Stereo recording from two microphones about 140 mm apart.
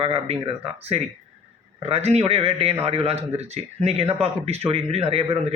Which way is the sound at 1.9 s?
50° right (ahead or behind).